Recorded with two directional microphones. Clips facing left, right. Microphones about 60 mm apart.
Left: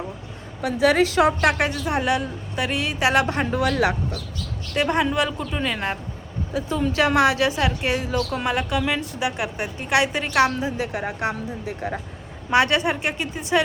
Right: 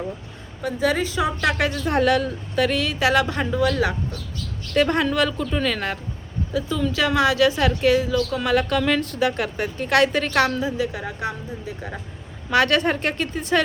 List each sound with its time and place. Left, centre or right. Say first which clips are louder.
0.6 s a woman's voice: left 4 dB; left
1.5 s a woman's voice: left 1 dB; left
4.7 s a woman's voice: right 2 dB; centre
6.5 s a woman's voice: even; left
11.3 s a woman's voice: left 2 dB; left
12.5 s a woman's voice: even; left